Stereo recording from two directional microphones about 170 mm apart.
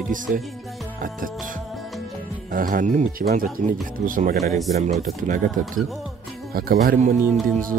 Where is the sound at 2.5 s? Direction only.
55° right (ahead or behind).